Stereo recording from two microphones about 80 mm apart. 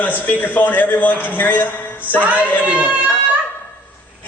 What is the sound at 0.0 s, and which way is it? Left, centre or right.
A man's voice, left.